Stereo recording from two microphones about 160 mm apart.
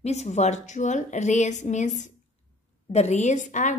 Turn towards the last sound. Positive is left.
turn(degrees=50)  # may be behind; listen again after turning